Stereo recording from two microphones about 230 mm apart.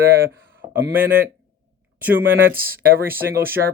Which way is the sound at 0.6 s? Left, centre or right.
Right.